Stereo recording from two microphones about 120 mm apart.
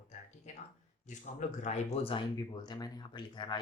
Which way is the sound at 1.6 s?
65° left (ahead or behind).